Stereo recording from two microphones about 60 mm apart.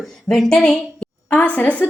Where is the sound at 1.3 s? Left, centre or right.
Left.